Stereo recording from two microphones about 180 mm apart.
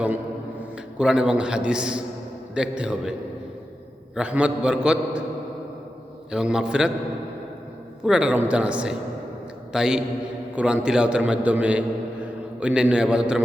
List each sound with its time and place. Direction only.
0.9 s a man's voice: 5° right (ahead or behind)
6.3 s a man's voice: 5° right (ahead or behind)
8.0 s a man's voice: 5° right (ahead or behind)